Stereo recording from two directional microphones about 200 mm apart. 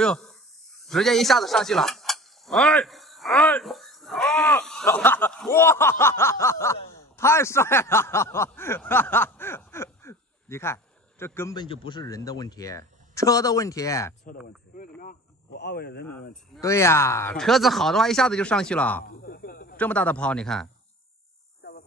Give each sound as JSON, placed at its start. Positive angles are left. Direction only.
{"t": 0.0, "sound": "speech", "side_deg": 5}
{"t": 0.8, "sound": "a sound", "side_deg": 0}
{"t": 4.9, "sound": "speech", "side_deg": 10}
{"t": 15.0, "sound": "speech", "side_deg": 50}
{"t": 16.6, "sound": "speech", "side_deg": 15}
{"t": 19.0, "sound": "snake", "side_deg": 50}
{"t": 19.8, "sound": "speech", "side_deg": 5}